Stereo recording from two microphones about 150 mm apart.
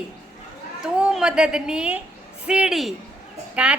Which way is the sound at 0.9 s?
5° right (ahead or behind).